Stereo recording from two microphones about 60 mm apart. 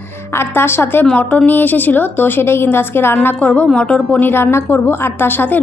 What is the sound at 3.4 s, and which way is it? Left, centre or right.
Speech, left.